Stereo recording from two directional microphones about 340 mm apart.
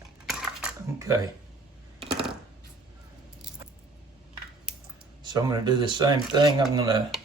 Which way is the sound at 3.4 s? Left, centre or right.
Centre.